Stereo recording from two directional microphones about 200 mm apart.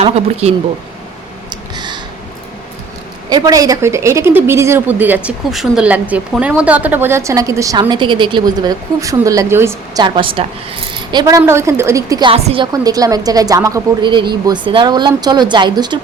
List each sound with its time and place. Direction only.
0.0 s speech: 30° right (ahead or behind)
1.5 s a sound: 20° right (ahead or behind)
3.2 s a woman's voice: 20° right (ahead or behind)